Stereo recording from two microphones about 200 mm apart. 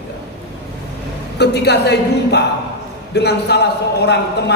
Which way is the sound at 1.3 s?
55° left (ahead or behind).